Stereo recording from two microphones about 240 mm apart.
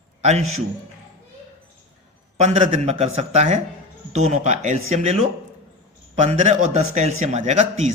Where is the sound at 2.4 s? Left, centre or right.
Right.